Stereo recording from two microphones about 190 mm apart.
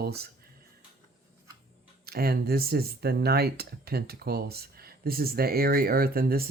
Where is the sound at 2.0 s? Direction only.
55° right (ahead or behind).